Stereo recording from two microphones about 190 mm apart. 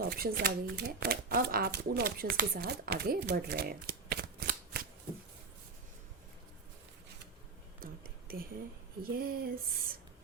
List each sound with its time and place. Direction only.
0.0 s speech: 55° right (ahead or behind)
8.3 s speech: 50° right (ahead or behind)
9.1 s a sound: 55° right (ahead or behind)